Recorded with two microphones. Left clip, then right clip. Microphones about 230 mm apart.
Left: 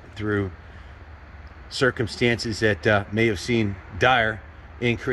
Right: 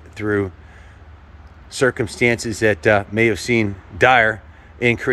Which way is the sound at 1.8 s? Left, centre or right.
Centre.